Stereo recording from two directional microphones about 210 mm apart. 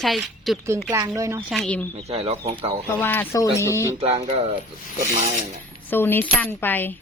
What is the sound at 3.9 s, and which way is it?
Speech, 30° right (ahead or behind).